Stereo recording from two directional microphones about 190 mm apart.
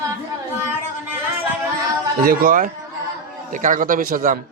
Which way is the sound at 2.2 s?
50° right (ahead or behind).